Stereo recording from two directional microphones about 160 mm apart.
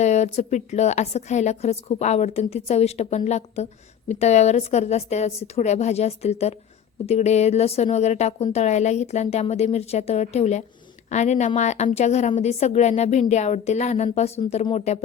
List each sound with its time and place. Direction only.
0.0 s a woman's voice: 45° left (ahead or behind)